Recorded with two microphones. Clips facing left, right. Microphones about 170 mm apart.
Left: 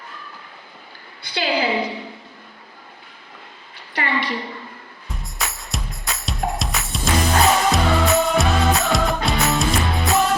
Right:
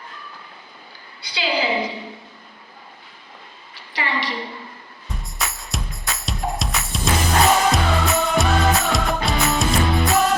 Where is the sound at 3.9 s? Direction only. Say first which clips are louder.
Left 2 dB; 55° left (ahead or behind).